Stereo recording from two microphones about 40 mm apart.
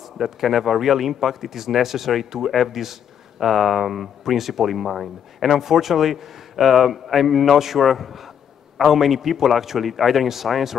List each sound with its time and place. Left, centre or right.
0.2 s speech: centre